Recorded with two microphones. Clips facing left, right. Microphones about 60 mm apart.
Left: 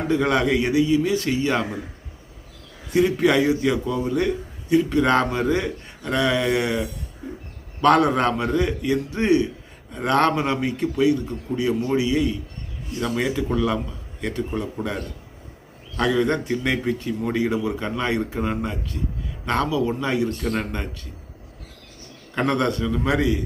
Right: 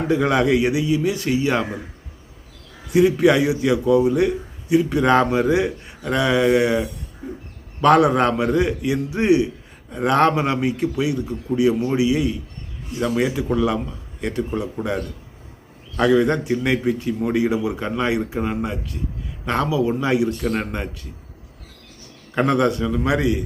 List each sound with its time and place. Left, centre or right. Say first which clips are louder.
0.1 s a man's voice: right 2 dB; centre
2.9 s a man's voice: right 3 dB; centre
22.4 s a man's voice: right 3 dB; centre